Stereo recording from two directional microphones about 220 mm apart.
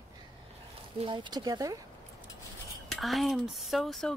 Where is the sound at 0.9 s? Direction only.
20° right (ahead or behind).